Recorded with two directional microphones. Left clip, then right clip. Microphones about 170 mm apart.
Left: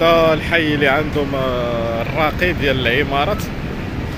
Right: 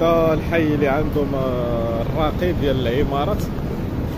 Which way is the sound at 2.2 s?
10° right (ahead or behind).